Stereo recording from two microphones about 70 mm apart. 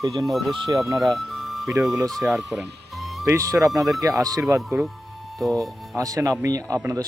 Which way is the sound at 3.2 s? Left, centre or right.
Right.